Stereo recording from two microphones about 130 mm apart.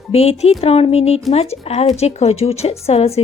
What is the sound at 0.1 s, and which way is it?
A woman's voice, 50° left (ahead or behind).